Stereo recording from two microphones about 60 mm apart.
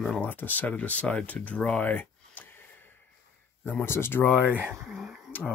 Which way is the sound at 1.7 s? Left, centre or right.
Left.